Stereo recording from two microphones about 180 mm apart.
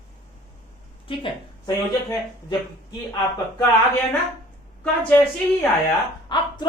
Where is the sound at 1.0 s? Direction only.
30° left (ahead or behind).